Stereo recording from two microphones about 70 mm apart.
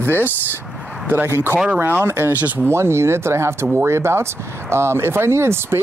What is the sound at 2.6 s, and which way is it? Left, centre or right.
Speech, right.